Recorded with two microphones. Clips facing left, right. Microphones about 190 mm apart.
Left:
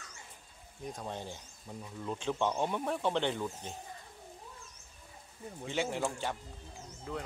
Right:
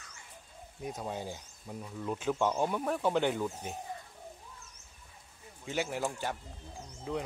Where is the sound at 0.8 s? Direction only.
10° right (ahead or behind).